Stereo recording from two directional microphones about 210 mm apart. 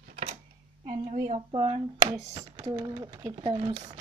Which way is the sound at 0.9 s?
25° right (ahead or behind).